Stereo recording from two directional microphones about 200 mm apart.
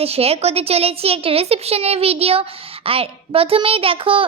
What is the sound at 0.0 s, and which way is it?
A woman's voice, 30° right (ahead or behind).